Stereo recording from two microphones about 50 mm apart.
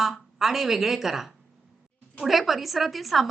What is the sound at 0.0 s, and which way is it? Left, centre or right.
A woman's voice, centre.